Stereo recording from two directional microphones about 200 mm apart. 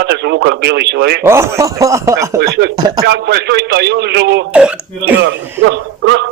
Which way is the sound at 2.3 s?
55° right (ahead or behind).